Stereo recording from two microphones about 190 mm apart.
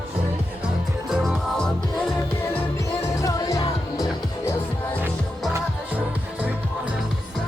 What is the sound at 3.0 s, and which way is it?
Music, 15° left (ahead or behind).